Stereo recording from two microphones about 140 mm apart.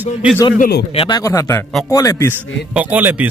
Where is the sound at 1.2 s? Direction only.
20° left (ahead or behind).